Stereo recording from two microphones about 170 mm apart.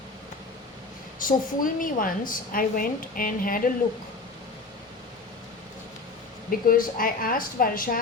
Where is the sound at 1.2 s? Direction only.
55° left (ahead or behind).